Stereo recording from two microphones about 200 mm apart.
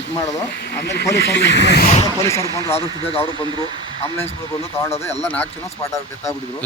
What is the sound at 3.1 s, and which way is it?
Speech, 30° left (ahead or behind).